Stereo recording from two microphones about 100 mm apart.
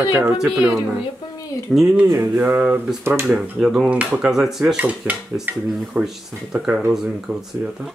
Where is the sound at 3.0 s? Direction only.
25° right (ahead or behind).